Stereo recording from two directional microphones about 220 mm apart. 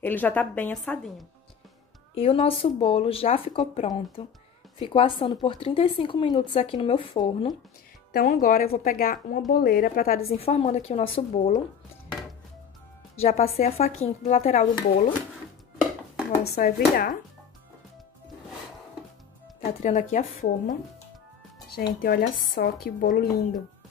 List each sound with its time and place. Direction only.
0.0 s a woman's voice: 10° left (ahead or behind)
2.1 s speech: 25° left (ahead or behind)
8.1 s a woman's voice: 40° left (ahead or behind)
10.1 s speech: 25° left (ahead or behind)
13.2 s a woman's voice: 30° left (ahead or behind)
16.4 s a woman's voice: 45° left (ahead or behind)
19.6 s a woman's voice: 35° left (ahead or behind)
21.7 s speech: 45° left (ahead or behind)